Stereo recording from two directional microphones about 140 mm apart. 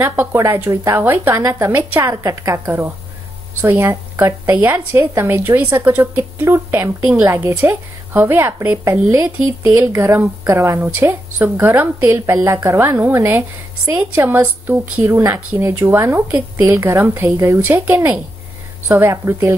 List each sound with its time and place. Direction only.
0.0 s a woman's voice: 15° right (ahead or behind)